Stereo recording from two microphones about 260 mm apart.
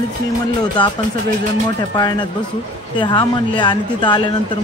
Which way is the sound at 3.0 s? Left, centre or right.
Centre.